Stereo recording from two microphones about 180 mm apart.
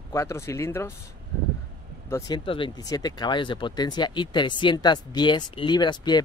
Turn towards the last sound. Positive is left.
turn(degrees=25)  # may be behind; listen again after turning